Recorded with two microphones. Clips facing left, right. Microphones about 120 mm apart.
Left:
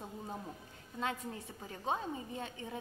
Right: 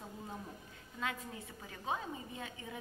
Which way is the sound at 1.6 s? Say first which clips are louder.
Left 3 dB; 30° left (ahead or behind).